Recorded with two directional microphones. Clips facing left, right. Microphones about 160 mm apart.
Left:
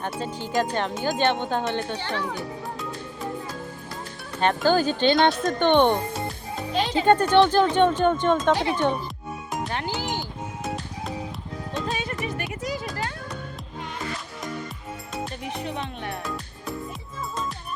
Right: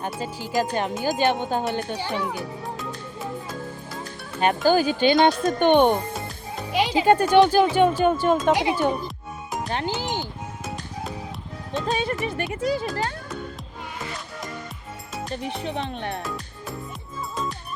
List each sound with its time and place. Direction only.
0.0 s speech: 5° right (ahead or behind)
4.4 s speech: 10° right (ahead or behind)
9.7 s music: 20° right (ahead or behind)
11.9 s music: 30° right (ahead or behind)
12.5 s a sound: 30° right (ahead or behind)
15.6 s speech: 30° right (ahead or behind)